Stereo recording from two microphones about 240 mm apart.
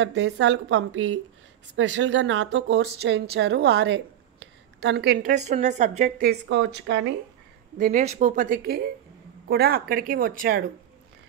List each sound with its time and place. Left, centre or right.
0.0 s speech: right
7.7 s speech: right